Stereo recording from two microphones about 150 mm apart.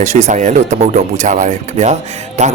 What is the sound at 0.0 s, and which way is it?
Speech, 50° right (ahead or behind).